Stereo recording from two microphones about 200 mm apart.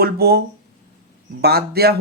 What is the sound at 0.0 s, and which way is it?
Speech, 50° right (ahead or behind).